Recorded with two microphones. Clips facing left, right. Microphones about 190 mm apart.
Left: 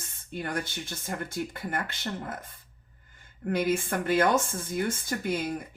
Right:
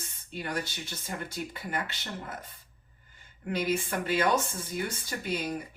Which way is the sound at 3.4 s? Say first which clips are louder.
Left 3 dB; 50° left (ahead or behind).